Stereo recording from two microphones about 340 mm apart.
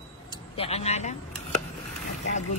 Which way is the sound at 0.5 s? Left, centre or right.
Centre.